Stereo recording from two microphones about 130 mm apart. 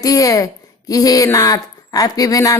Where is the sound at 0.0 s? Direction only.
25° left (ahead or behind).